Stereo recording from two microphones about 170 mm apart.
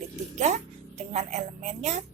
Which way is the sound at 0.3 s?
45° right (ahead or behind).